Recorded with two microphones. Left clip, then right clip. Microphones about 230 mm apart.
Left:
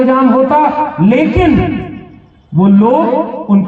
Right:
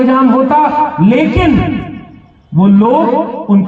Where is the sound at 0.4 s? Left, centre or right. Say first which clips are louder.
Right 1 dB; right.